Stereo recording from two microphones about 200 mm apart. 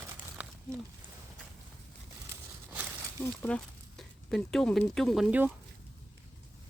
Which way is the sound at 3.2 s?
10° left (ahead or behind).